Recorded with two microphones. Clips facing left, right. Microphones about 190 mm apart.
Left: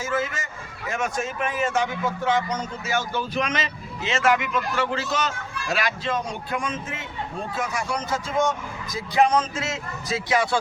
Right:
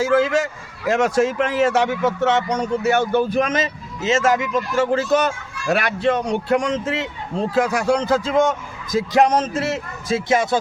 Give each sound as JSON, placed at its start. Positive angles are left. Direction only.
{"t": 0.0, "sound": "a man's voice", "side_deg": -80}
{"t": 9.1, "sound": "speech", "side_deg": -40}